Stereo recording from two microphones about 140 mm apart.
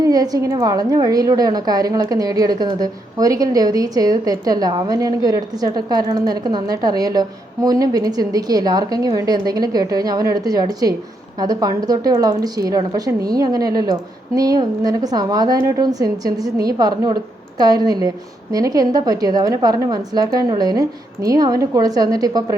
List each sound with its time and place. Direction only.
0.0 s a woman's voice: 25° right (ahead or behind)